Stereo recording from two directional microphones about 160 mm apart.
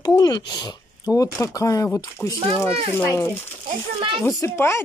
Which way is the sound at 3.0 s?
15° left (ahead or behind).